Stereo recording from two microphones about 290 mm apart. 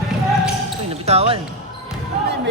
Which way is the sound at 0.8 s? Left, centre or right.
Right.